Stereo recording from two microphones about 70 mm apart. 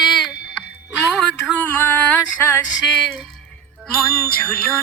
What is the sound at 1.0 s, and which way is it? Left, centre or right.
Music, centre.